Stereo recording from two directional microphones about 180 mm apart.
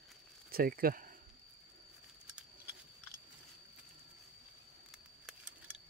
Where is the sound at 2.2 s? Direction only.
5° right (ahead or behind).